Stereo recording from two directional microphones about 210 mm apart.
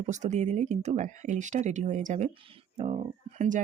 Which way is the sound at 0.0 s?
35° right (ahead or behind).